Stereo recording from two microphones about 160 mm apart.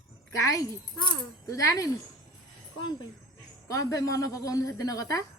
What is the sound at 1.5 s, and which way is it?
Speech, 20° left (ahead or behind).